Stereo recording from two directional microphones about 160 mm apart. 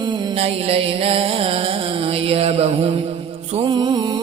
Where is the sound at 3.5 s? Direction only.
30° right (ahead or behind).